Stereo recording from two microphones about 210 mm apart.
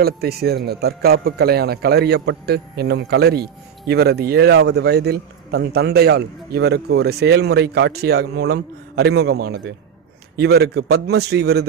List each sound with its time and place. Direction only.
0.0 s a man's voice: 50° right (ahead or behind)